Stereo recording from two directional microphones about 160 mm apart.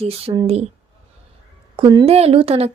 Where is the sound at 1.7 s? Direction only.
35° right (ahead or behind).